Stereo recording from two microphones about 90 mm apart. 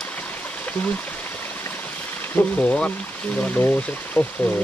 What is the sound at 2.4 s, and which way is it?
Speech, 15° left (ahead or behind).